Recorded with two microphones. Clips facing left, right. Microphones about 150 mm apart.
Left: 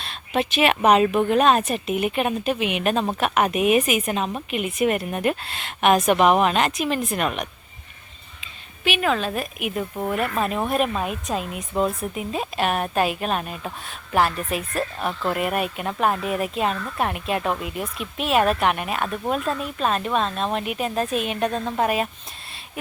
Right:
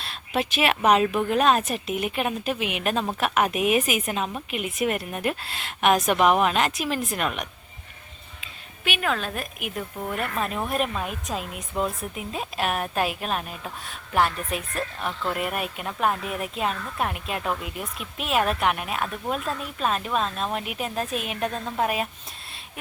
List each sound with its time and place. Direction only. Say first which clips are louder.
0.0 s speech: left 3 dB; 5° right (ahead or behind)
8.8 s speech: left 5 dB; centre (ahead or behind)